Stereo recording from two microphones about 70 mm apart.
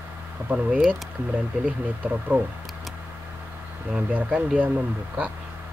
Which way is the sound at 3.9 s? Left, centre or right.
Right.